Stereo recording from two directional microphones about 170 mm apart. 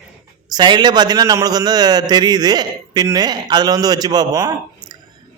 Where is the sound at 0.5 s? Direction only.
25° right (ahead or behind).